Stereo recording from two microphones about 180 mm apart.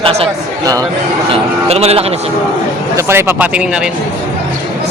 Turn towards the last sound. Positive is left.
turn(degrees=-10)  # may be behind; listen again after turning